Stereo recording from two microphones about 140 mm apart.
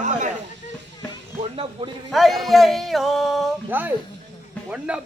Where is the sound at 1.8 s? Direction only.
35° right (ahead or behind).